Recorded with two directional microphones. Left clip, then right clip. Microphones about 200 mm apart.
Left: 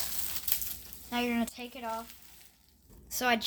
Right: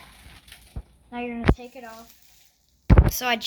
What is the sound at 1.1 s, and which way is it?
Speech, 55° left (ahead or behind).